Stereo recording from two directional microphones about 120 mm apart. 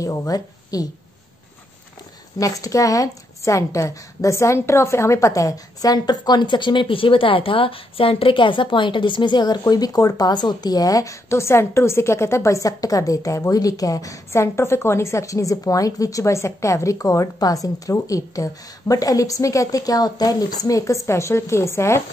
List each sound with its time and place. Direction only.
0.0 s a woman's voice: 25° left (ahead or behind)
2.3 s a woman's voice: 30° left (ahead or behind)